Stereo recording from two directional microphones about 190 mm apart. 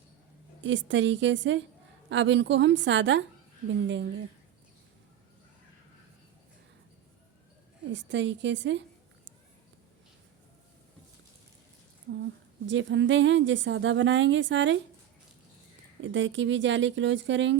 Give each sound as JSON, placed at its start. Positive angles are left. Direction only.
{"t": 0.6, "sound": "a woman's voice", "side_deg": -75}
{"t": 7.9, "sound": "a woman's voice", "side_deg": -70}
{"t": 12.6, "sound": "a woman's voice", "side_deg": -75}
{"t": 16.0, "sound": "a woman's voice", "side_deg": -75}